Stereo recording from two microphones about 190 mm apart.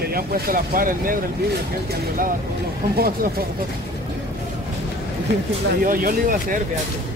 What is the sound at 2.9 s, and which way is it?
Speech, 50° right (ahead or behind).